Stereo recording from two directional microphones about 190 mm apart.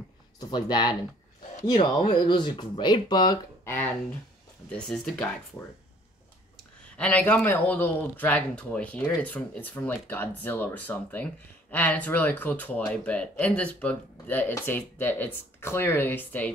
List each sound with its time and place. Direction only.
0.4 s speech: 20° left (ahead or behind); by 5.3 s 5° left (ahead or behind)
7.0 s speech: 5° left (ahead or behind)